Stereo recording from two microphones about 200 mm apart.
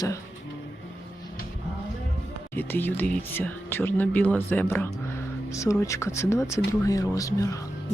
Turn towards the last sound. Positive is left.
turn(degrees=15)  # may be behind; listen again after turning